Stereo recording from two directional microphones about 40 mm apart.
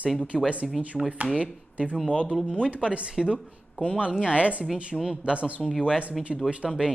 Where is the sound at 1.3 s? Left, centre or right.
Right.